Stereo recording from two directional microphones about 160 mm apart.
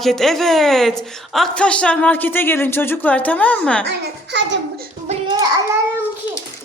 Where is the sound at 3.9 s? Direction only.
90° right.